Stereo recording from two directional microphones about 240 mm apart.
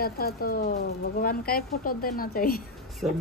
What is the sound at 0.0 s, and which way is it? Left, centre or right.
Speech, left.